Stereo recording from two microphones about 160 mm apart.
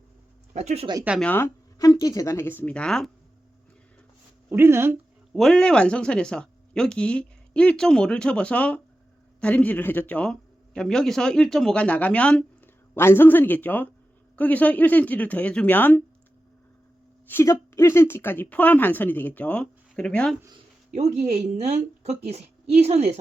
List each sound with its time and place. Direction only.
0.5 s speech: 45° right (ahead or behind)
1.2 s speech: 10° left (ahead or behind)
1.8 s speech: 25° left (ahead or behind); by 3.1 s 5° left (ahead or behind)
4.4 s speech: 15° right (ahead or behind)
5.3 s speech: centre (ahead or behind)
17.2 s speech: 15° left (ahead or behind)
21.4 s speech: 45° right (ahead or behind)